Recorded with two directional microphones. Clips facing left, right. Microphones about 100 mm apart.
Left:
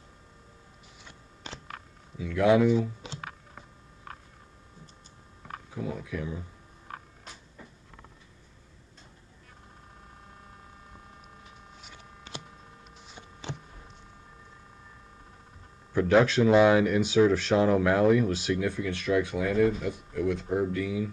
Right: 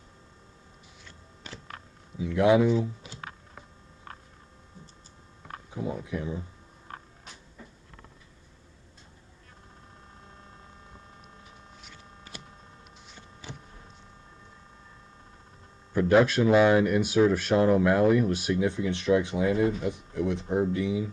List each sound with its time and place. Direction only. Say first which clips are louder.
1.0 s a sound: left 3 dB; 20° left (ahead or behind)
2.1 s speech: right 1 dB; 20° right (ahead or behind)
5.8 s speech: right 2 dB; 25° right (ahead or behind)
13.1 s a sound: left 5 dB; 20° left (ahead or behind)
15.9 s speech: right 1 dB; 5° right (ahead or behind)
18.6 s speech: right 3 dB; 20° right (ahead or behind)